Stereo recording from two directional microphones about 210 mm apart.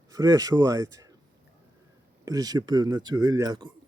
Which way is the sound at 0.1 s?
15° right (ahead or behind).